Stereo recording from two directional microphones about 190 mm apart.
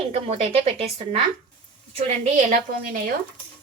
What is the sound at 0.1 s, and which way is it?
A woman's voice, 35° right (ahead or behind).